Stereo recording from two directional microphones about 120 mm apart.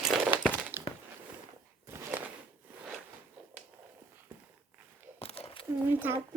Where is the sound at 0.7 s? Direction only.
20° right (ahead or behind).